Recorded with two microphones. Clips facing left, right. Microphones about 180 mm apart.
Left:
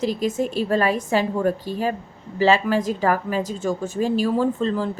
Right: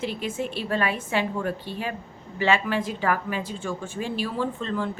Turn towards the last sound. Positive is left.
turn(degrees=35)  # may be behind; listen again after turning